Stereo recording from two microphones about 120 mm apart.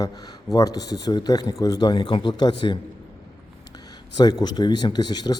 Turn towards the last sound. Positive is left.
turn(degrees=35)  # may be behind; listen again after turning